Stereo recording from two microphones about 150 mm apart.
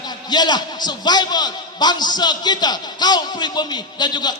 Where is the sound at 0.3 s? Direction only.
30° left (ahead or behind).